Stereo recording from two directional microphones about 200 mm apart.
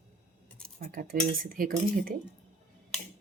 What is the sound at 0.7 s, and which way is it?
Speech, 45° right (ahead or behind).